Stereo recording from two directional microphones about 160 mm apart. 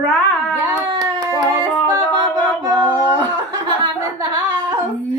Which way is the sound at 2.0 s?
10° left (ahead or behind).